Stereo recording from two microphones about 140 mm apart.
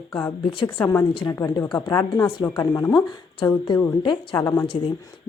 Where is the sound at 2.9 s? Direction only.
30° left (ahead or behind).